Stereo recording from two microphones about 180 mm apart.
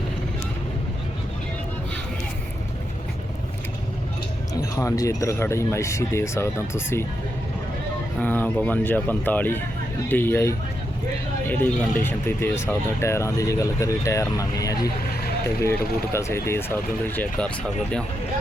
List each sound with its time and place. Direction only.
4.8 s speech: 15° left (ahead or behind)
8.2 s speech: 10° left (ahead or behind)
16.1 s speech: 15° left (ahead or behind)